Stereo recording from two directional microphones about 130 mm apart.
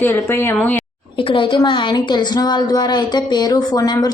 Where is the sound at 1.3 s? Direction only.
40° left (ahead or behind).